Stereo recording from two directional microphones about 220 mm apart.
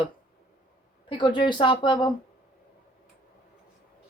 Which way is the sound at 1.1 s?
20° left (ahead or behind).